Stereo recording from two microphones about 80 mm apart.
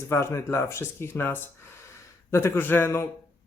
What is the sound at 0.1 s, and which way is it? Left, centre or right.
Speech, left.